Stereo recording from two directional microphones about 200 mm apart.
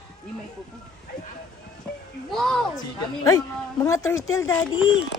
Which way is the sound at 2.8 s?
20° left (ahead or behind).